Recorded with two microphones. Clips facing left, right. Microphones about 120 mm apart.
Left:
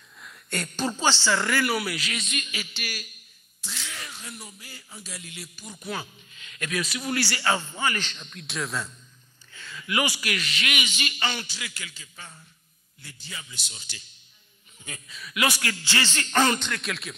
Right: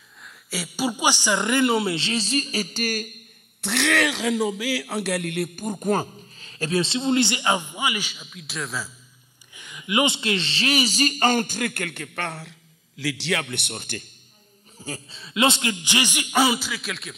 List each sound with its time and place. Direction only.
0.2 s speech: centre (ahead or behind)
9.5 s a woman's voice: 15° right (ahead or behind); by 14.0 s 55° right (ahead or behind)
14.8 s a man's voice: 30° right (ahead or behind); by 17.1 s centre (ahead or behind)